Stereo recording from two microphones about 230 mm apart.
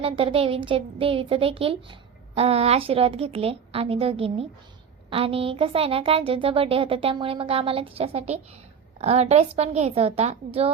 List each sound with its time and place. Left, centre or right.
0.0 s a woman's voice: right